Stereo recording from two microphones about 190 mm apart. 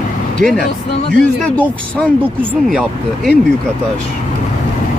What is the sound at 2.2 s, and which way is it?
Speech, 5° right (ahead or behind).